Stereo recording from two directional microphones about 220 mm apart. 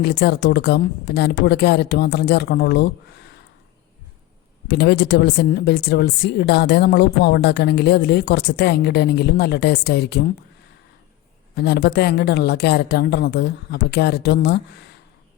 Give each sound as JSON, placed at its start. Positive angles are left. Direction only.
{"t": 0.0, "sound": "a woman's voice", "side_deg": 50}
{"t": 4.7, "sound": "a woman's voice", "side_deg": 50}
{"t": 11.5, "sound": "a woman's voice", "side_deg": 50}